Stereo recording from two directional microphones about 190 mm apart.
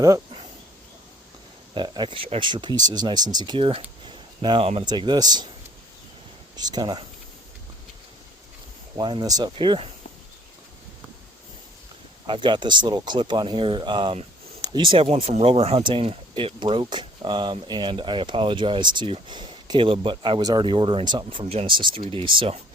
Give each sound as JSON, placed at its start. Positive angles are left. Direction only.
{"t": 0.0, "sound": "a sound", "side_deg": -20}
{"t": 1.7, "sound": "speech", "side_deg": -25}
{"t": 6.6, "sound": "speech", "side_deg": -20}
{"t": 9.0, "sound": "speech", "side_deg": -25}
{"t": 12.2, "sound": "speech", "side_deg": -25}